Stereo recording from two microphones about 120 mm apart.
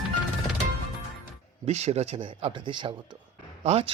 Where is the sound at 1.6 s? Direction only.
65° right (ahead or behind); by 2.9 s 40° right (ahead or behind).